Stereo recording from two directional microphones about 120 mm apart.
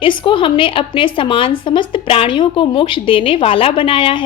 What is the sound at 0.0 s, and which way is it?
A woman's voice, 45° left (ahead or behind).